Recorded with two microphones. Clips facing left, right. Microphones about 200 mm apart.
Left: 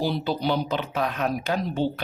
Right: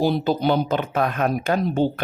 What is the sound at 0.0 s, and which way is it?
Speech, 50° right (ahead or behind).